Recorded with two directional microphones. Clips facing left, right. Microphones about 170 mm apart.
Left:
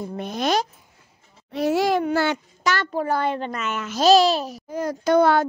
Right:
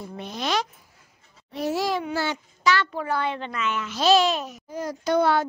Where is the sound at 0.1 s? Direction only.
50° left (ahead or behind).